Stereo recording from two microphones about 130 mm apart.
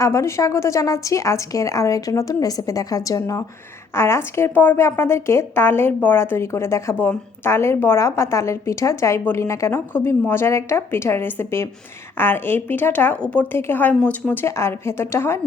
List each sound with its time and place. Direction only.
0.0 s a woman's voice: 20° left (ahead or behind)
14.4 s a woman's voice: 20° left (ahead or behind)